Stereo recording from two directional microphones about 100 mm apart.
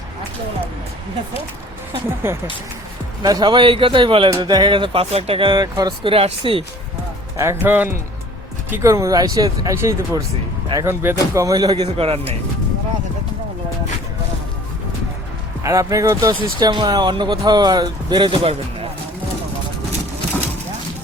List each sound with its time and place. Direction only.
2.2 s speech: 25° right (ahead or behind)
3.2 s a man's voice: 45° right (ahead or behind)
4.4 s a man's voice: 45° right (ahead or behind)
5.1 s a man's voice: 80° right; by 5.9 s 40° right (ahead or behind)
6.0 s a man's voice: 70° right (ahead or behind)
7.3 s speech: 25° right (ahead or behind)
8.8 s speech: 30° right (ahead or behind)
11.9 s speech: 70° right (ahead or behind)
15.6 s speech: 30° right (ahead or behind); by 18.5 s 55° right (ahead or behind)